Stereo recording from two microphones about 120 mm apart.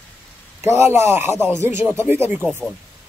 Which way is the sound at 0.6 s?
20° right (ahead or behind).